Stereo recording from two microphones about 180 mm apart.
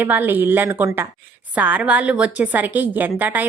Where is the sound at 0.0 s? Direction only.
10° right (ahead or behind).